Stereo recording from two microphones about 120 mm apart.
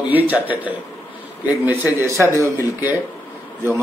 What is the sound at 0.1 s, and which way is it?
A man's voice, 15° right (ahead or behind).